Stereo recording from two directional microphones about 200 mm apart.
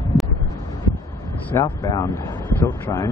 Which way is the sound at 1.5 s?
15° left (ahead or behind).